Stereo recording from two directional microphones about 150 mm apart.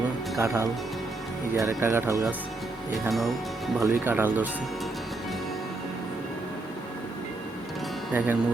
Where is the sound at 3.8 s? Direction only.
15° right (ahead or behind).